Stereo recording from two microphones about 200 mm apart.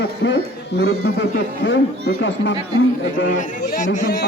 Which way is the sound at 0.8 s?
80° left.